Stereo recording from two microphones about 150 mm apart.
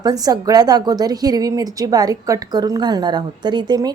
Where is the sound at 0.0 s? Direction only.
25° right (ahead or behind).